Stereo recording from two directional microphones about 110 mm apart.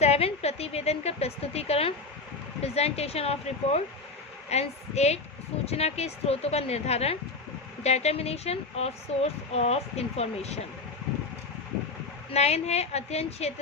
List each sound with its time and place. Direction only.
0.0 s a woman's voice: 70° left (ahead or behind)
12.3 s speech: 75° left (ahead or behind)